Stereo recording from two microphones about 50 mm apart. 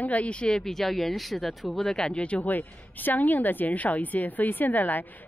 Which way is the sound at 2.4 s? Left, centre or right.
Left.